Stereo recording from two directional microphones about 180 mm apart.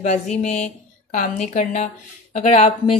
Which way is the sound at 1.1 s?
40° left (ahead or behind).